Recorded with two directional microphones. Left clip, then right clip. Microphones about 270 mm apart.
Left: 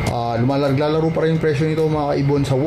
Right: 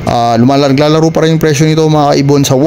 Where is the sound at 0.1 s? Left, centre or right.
Right.